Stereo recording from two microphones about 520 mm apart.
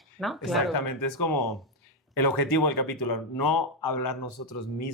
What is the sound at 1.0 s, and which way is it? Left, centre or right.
Speech, left.